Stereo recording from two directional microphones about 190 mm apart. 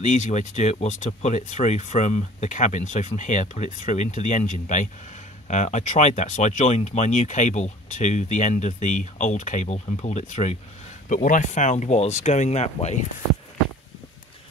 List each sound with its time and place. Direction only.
0.0 s speech: 40° left (ahead or behind)